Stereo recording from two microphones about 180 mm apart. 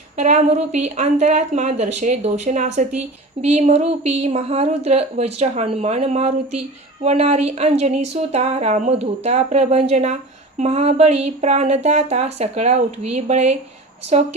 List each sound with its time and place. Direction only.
0.2 s speech: 40° right (ahead or behind)